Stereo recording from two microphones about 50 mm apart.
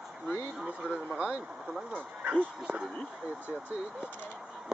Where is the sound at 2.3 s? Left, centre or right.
Centre.